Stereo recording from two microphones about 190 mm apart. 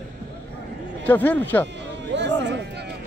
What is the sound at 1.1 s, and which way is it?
Speech, 10° left (ahead or behind).